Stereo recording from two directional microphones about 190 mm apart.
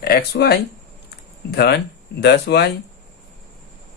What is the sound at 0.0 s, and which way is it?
Speech, 55° left (ahead or behind).